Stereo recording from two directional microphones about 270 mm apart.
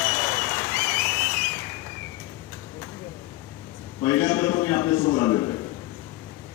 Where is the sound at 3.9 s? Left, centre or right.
Centre.